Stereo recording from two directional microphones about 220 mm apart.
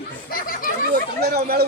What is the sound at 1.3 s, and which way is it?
Speech, 45° right (ahead or behind).